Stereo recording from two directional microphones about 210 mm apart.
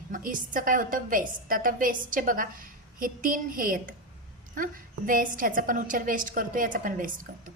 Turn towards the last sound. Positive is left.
turn(degrees=-40)  # may be behind; listen again after turning